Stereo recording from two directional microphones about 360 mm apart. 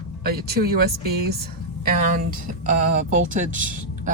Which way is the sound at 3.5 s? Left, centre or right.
Right.